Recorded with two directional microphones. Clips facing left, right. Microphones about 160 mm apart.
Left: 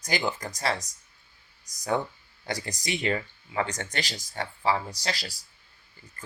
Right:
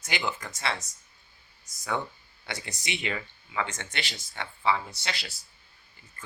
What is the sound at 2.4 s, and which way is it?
Speech, 40° left (ahead or behind).